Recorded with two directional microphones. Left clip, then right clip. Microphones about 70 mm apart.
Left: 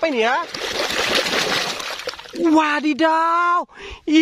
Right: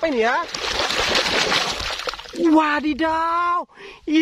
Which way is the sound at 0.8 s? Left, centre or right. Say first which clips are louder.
Left 1 dB; left.